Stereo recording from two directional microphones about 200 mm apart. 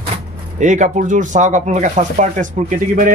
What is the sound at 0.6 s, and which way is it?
Speech, 35° right (ahead or behind).